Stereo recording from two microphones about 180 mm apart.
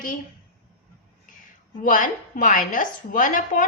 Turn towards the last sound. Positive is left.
turn(degrees=45)  # may be behind; listen again after turning